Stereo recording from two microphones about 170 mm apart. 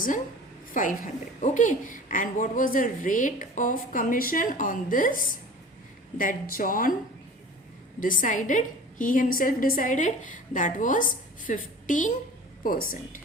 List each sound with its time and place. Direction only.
0.7 s a woman's voice: 50° left (ahead or behind)
7.9 s a woman's voice: 50° left (ahead or behind)